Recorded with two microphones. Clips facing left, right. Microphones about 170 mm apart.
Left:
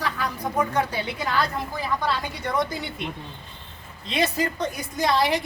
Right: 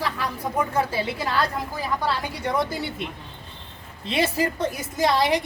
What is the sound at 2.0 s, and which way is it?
Speech, 10° right (ahead or behind).